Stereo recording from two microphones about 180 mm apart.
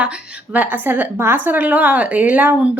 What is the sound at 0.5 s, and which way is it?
A woman's voice, 10° right (ahead or behind).